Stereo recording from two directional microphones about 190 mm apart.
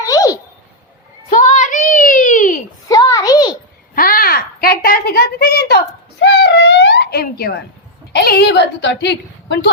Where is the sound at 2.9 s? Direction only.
20° left (ahead or behind).